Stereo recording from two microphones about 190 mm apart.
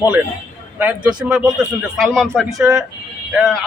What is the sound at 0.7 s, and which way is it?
A man's voice, 10° right (ahead or behind).